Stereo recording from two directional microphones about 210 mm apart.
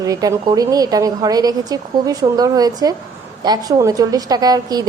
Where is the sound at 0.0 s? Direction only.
15° right (ahead or behind).